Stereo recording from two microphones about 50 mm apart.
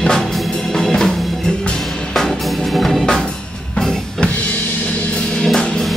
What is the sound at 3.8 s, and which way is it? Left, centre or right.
Music, centre.